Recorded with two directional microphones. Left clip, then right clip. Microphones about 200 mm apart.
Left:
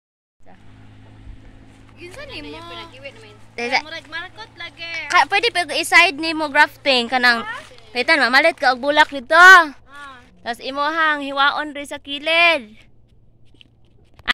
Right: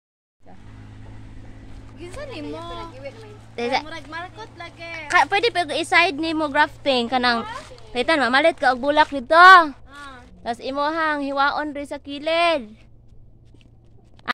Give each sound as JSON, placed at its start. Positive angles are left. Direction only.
{"t": 2.0, "sound": "speech", "side_deg": -60}
{"t": 3.5, "sound": "speech", "side_deg": 10}
{"t": 3.8, "sound": "speech", "side_deg": -50}
{"t": 4.9, "sound": "speech", "side_deg": 10}
{"t": 9.1, "sound": "a woman's voice", "side_deg": 0}
{"t": 14.2, "sound": "a sound", "side_deg": 40}